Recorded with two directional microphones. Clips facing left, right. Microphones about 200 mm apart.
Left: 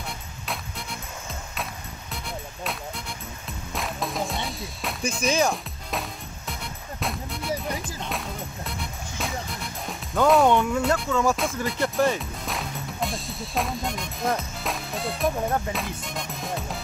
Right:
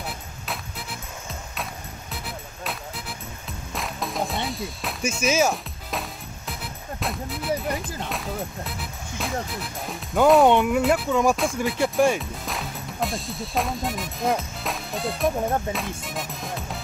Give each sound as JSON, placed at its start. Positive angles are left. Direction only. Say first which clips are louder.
{"t": 0.0, "sound": "music", "louder": "right 2 dB", "side_deg": -5}
{"t": 2.2, "sound": "music", "louder": "left 2 dB", "side_deg": 0}
{"t": 10.2, "sound": "speech", "louder": "right 3 dB", "side_deg": 0}
{"t": 10.5, "sound": "speech", "louder": "right 2 dB", "side_deg": -15}
{"t": 10.8, "sound": "speech", "louder": "right 3 dB", "side_deg": -5}
{"t": 11.1, "sound": "speech", "louder": "right 2 dB", "side_deg": -15}
{"t": 12.2, "sound": "music", "louder": "even", "side_deg": 0}